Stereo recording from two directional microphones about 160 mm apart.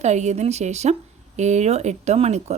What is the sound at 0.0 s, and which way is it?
Speech, 45° right (ahead or behind).